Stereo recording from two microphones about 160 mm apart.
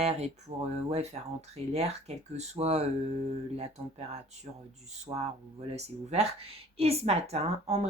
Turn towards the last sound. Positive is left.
turn(degrees=-40)  # may be behind; listen again after turning